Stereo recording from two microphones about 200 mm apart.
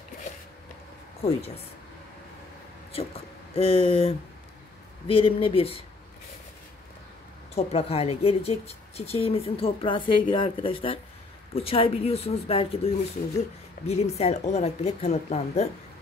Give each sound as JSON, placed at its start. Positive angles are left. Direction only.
{"t": 3.5, "sound": "a woman's voice", "side_deg": 30}
{"t": 7.5, "sound": "a woman's voice", "side_deg": 30}